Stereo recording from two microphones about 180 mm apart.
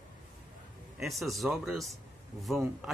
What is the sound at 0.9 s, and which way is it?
Speech, centre (ahead or behind).